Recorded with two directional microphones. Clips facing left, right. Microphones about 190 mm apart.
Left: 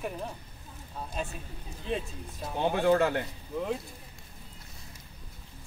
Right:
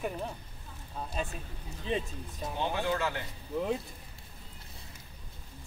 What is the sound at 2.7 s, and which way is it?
Speech, 55° left (ahead or behind).